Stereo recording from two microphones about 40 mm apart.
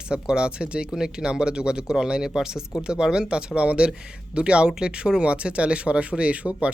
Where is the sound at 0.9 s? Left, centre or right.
Centre.